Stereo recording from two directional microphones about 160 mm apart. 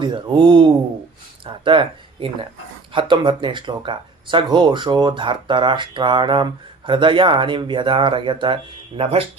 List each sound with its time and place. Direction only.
0.0 s speech: 30° right (ahead or behind)